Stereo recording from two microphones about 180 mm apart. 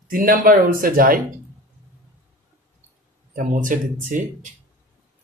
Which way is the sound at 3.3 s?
45° right (ahead or behind).